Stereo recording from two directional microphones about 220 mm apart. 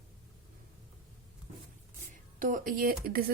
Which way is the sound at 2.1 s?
35° right (ahead or behind).